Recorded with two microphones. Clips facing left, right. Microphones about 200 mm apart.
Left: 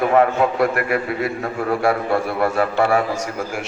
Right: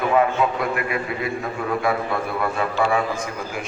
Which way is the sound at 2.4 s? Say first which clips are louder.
Left 3 dB; 65° left (ahead or behind).